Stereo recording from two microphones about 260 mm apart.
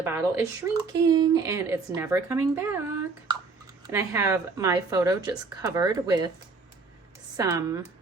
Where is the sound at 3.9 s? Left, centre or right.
Centre.